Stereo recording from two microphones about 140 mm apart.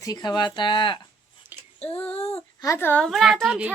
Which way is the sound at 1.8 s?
45° left (ahead or behind).